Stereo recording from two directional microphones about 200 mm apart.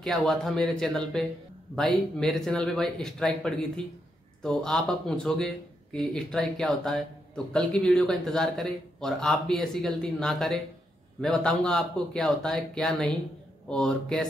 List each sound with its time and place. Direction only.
0.0 s a man's voice: centre (ahead or behind)